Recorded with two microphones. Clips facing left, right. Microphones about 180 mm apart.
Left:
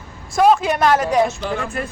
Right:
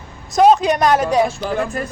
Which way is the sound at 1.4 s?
40° right (ahead or behind).